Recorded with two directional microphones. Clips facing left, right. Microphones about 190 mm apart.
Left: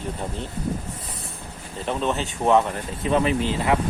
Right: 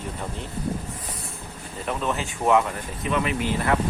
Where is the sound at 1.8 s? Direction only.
25° left (ahead or behind).